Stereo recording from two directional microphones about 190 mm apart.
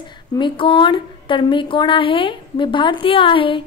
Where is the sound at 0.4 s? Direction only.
25° left (ahead or behind).